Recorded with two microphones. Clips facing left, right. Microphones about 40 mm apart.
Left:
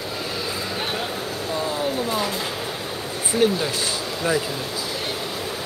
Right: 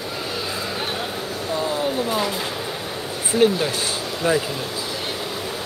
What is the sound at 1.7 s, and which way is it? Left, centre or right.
Vehicle, centre.